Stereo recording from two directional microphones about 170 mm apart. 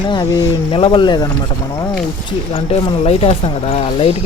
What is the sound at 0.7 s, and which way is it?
Speech, 30° left (ahead or behind).